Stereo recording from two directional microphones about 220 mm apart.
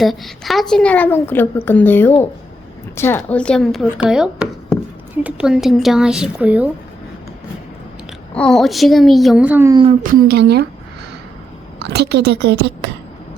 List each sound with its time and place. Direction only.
0.0 s a woman's voice: centre (ahead or behind)
8.3 s speech: 5° left (ahead or behind)
10.0 s a woman's voice: 40° right (ahead or behind)
11.9 s a woman's voice: 45° right (ahead or behind)